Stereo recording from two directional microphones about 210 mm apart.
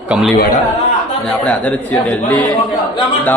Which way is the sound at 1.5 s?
5° left (ahead or behind).